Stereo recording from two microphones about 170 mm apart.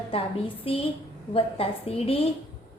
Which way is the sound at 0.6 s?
35° left (ahead or behind).